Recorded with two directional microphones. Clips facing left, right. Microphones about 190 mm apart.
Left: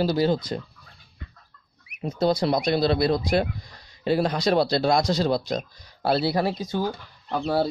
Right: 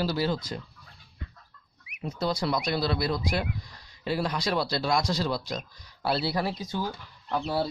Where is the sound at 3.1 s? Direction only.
50° left (ahead or behind).